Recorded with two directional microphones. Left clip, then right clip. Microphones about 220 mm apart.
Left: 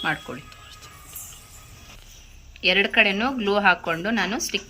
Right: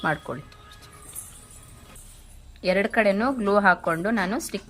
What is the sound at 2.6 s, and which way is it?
Speech, 20° right (ahead or behind).